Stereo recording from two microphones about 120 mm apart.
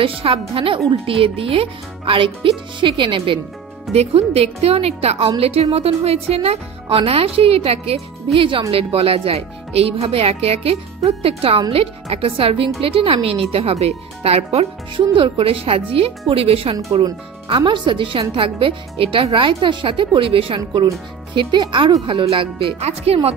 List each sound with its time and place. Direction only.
0.0 s speech: 50° right (ahead or behind)
3.9 s speech: 60° right (ahead or behind)
17.0 s speech: 40° right (ahead or behind); by 23.3 s 55° right (ahead or behind)